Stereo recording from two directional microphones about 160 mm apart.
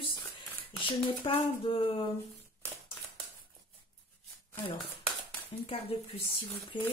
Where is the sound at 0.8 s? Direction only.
30° left (ahead or behind).